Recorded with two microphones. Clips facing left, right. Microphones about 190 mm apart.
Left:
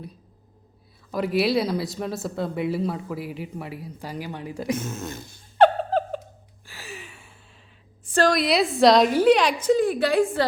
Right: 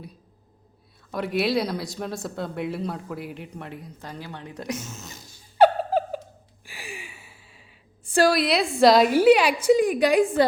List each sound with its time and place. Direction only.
1.1 s speech: centre (ahead or behind)
4.7 s speech: 55° left (ahead or behind)
5.4 s a sound: 5° right (ahead or behind)
8.1 s a woman's voice: 5° right (ahead or behind)